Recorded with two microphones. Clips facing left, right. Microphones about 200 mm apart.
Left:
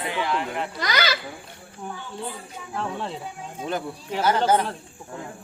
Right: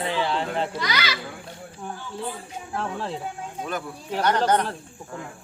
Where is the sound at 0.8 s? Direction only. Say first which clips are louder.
Left 3 dB; 40° left (ahead or behind).